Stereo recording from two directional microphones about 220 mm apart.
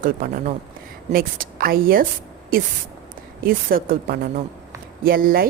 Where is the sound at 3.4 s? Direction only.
40° right (ahead or behind).